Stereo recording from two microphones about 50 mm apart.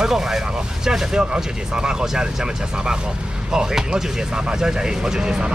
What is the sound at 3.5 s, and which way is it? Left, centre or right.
Speech, centre.